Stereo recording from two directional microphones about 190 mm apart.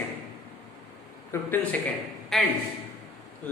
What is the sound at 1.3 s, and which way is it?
Speech, 15° left (ahead or behind).